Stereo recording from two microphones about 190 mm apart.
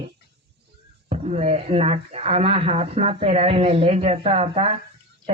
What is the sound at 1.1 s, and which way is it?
Speech, 35° right (ahead or behind).